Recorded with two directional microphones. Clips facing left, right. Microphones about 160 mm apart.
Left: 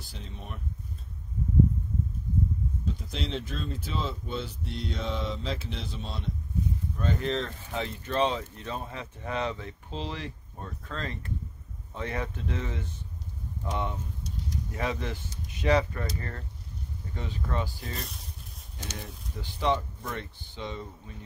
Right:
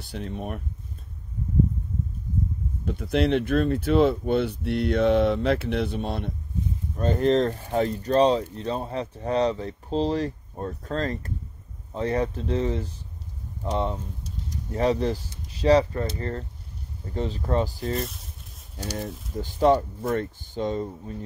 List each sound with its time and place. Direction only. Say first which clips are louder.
0.0 s speech: right 11 dB; 60° right (ahead or behind)
2.8 s speech: right 11 dB; 60° right (ahead or behind)
7.0 s speech: right 10 dB; 40° right (ahead or behind)
17.9 s speech: right 10 dB; centre (ahead or behind)
18.8 s speech: right 9 dB; 35° right (ahead or behind)